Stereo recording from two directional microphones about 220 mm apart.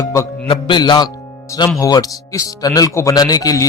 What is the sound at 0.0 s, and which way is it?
A man's voice, 15° left (ahead or behind).